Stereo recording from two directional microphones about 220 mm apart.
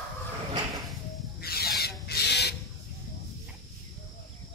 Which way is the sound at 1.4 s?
45° left (ahead or behind).